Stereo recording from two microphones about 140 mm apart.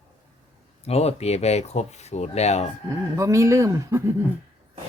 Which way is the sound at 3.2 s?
20° right (ahead or behind).